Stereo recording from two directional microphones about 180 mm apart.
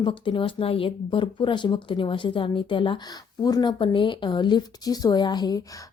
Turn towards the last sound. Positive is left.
turn(degrees=25)  # may be behind; listen again after turning